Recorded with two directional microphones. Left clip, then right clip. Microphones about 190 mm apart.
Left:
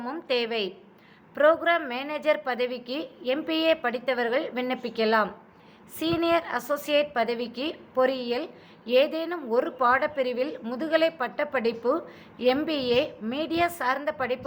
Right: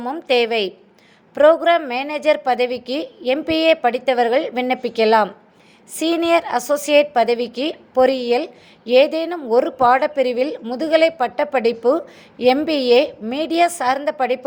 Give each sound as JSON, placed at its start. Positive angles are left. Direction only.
{"t": 0.0, "sound": "a woman's voice", "side_deg": -30}